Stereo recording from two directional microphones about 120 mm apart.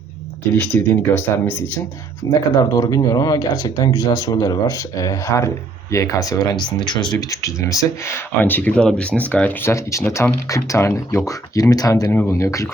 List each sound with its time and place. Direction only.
0.5 s speech: 10° left (ahead or behind)
2.3 s speech: 30° left (ahead or behind)